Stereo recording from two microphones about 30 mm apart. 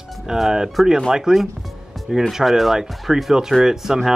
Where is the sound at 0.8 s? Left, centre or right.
Centre.